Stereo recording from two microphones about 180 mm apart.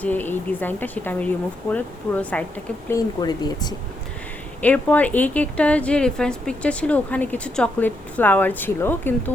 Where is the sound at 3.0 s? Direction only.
20° left (ahead or behind).